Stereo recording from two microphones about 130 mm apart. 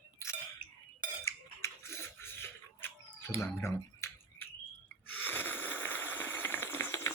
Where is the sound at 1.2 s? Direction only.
20° left (ahead or behind).